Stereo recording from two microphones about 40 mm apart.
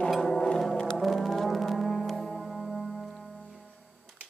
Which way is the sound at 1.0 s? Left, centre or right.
Centre.